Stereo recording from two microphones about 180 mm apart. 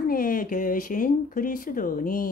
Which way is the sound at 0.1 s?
50° left (ahead or behind).